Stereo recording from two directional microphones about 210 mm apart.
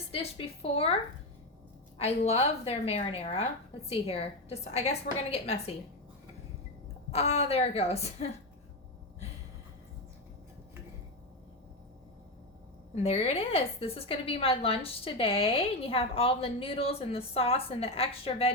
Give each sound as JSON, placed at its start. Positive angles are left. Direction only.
{"t": 0.1, "sound": "a woman's voice", "side_deg": 25}
{"t": 2.0, "sound": "a woman's voice", "side_deg": 30}
{"t": 7.1, "sound": "a woman's voice", "side_deg": 30}
{"t": 12.9, "sound": "a woman's voice", "side_deg": 30}